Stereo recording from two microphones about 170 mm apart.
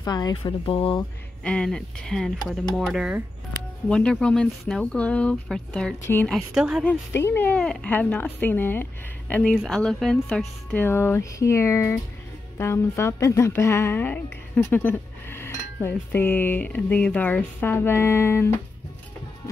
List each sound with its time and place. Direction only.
0.0 s speech: 25° left (ahead or behind)
1.4 s speech: 5° left (ahead or behind)
3.9 s speech: 5° left (ahead or behind)
6.3 s speech: 5° right (ahead or behind)
6.9 s speech: 15° left (ahead or behind)